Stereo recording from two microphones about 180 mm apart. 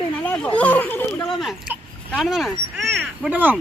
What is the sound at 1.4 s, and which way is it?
Speech, 5° right (ahead or behind).